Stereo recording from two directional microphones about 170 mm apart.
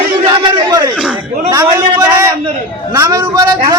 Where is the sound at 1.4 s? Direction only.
20° right (ahead or behind).